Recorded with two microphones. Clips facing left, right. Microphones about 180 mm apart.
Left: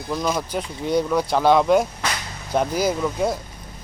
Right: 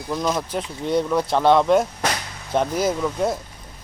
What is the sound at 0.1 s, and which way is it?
Speech, centre (ahead or behind).